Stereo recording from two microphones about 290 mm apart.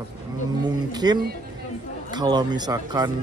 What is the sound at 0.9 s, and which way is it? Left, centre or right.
Speech, centre.